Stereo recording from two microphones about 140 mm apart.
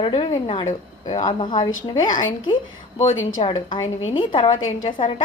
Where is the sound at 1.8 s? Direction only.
70° left (ahead or behind).